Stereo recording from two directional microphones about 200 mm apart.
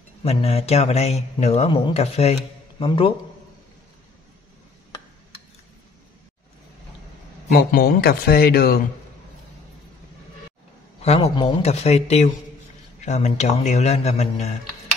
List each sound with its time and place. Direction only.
0.2 s a man's voice: 30° left (ahead or behind)
7.7 s speech: 50° left (ahead or behind)
11.0 s a man's voice: 30° left (ahead or behind)